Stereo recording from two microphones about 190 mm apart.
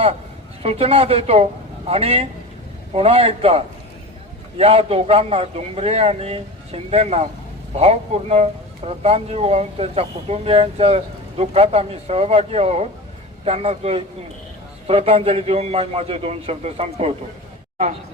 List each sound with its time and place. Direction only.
0.6 s speech: 30° right (ahead or behind)